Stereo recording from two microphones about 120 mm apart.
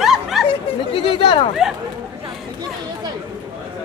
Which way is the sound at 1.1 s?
45° left (ahead or behind).